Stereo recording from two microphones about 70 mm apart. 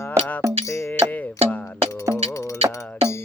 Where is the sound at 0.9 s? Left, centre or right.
Left.